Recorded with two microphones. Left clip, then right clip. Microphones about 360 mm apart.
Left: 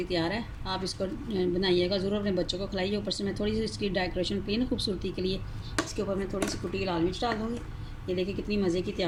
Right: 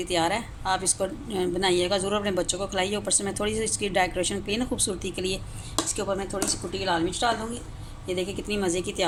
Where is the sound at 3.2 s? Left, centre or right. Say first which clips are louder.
Right 3 dB; right.